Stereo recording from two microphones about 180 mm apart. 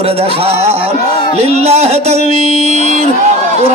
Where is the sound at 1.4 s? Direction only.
35° right (ahead or behind).